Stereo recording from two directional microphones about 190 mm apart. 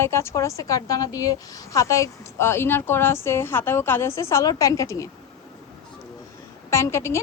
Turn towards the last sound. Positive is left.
turn(degrees=15)  # may be behind; listen again after turning